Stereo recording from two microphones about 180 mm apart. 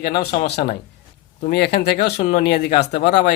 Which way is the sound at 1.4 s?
65° left (ahead or behind).